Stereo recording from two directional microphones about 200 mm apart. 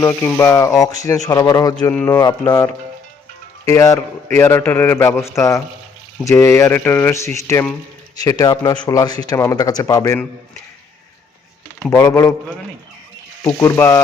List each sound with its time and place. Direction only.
0.0 s a man's voice: 10° left (ahead or behind)
3.7 s a man's voice: 15° left (ahead or behind)
11.8 s a man's voice: 15° left (ahead or behind)
13.4 s a man's voice: 20° left (ahead or behind)